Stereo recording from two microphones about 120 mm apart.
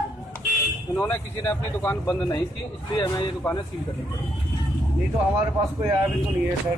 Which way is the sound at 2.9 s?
35° left (ahead or behind).